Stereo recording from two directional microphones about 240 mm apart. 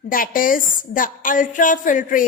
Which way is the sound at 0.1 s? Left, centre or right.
Left.